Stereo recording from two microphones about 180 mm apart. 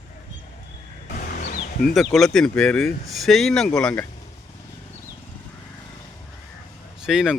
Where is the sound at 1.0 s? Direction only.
55° left (ahead or behind).